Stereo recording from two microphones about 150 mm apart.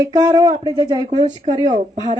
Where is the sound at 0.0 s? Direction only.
25° right (ahead or behind).